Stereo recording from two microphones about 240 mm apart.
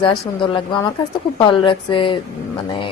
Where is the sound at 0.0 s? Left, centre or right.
Left.